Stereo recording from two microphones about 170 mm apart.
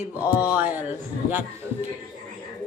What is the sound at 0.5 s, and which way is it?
Speech, 10° right (ahead or behind).